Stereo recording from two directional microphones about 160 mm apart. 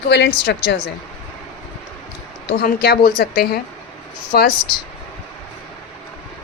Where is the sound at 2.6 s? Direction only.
75° left (ahead or behind).